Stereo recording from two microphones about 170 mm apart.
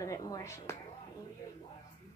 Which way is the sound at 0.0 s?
20° left (ahead or behind).